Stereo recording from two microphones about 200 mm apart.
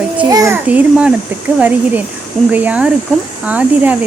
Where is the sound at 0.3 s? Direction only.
20° right (ahead or behind).